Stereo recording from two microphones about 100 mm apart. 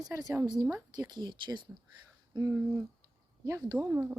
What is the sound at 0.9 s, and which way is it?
Speech, 45° right (ahead or behind).